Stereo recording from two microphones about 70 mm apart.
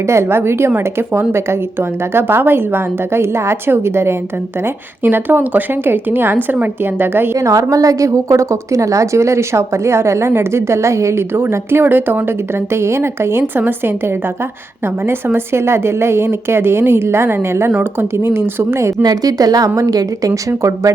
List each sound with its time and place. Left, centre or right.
0.1 s a woman's voice: right
7.3 s a woman's voice: right
15.0 s a woman's voice: right
19.0 s a woman's voice: right